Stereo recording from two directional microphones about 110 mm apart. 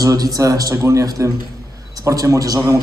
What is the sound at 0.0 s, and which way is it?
A man's voice, 30° right (ahead or behind).